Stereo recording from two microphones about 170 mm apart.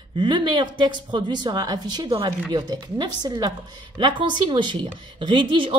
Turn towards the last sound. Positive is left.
turn(degrees=-30)  # may be behind; listen again after turning